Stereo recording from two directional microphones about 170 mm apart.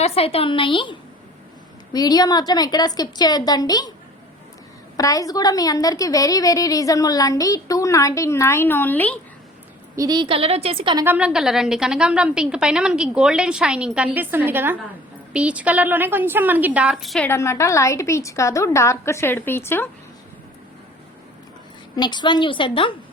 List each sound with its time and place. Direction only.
0.0 s a woman's voice: 35° left (ahead or behind)
4.9 s a woman's voice: 20° left (ahead or behind)
9.9 s a woman's voice: 20° right (ahead or behind)
10.9 s a woman's voice: 10° right (ahead or behind)
17.2 s a woman's voice: 15° left (ahead or behind)
21.9 s a woman's voice: 25° left (ahead or behind)